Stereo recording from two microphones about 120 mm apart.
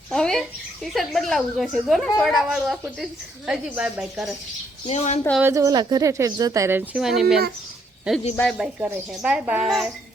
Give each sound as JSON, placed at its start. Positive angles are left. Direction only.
{"t": 0.1, "sound": "bathtub", "side_deg": 5}
{"t": 0.9, "sound": "speech", "side_deg": 0}
{"t": 4.9, "sound": "speech", "side_deg": 65}
{"t": 5.4, "sound": "speech", "side_deg": -25}
{"t": 7.0, "sound": "speech", "side_deg": -5}
{"t": 8.5, "sound": "a woman's voice", "side_deg": -5}